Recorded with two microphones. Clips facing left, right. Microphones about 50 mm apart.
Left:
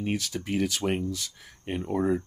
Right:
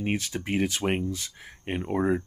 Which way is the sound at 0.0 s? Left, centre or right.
Right.